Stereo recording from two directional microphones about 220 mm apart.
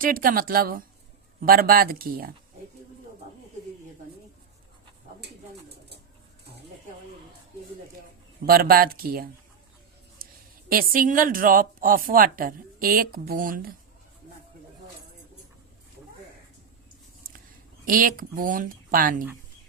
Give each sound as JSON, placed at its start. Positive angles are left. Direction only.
{"t": 0.0, "sound": "speech", "side_deg": -40}
{"t": 5.2, "sound": "bird", "side_deg": -50}
{"t": 8.4, "sound": "speech", "side_deg": -45}
{"t": 10.2, "sound": "a sound", "side_deg": -40}
{"t": 10.7, "sound": "speech", "side_deg": -40}
{"t": 17.8, "sound": "speech", "side_deg": -40}